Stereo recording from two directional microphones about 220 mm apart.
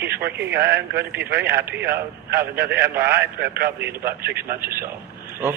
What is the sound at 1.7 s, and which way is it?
Speech, 45° right (ahead or behind).